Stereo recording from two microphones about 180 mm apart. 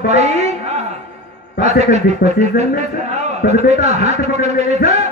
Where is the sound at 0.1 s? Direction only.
40° right (ahead or behind).